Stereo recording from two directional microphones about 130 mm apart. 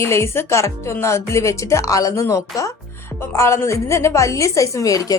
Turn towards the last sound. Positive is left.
turn(degrees=25)  # may be behind; listen again after turning